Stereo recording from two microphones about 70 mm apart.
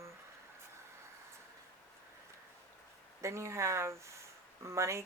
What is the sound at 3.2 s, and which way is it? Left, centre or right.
Speech, right.